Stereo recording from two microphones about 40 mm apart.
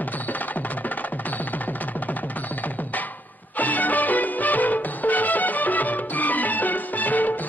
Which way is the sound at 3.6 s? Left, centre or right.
Left.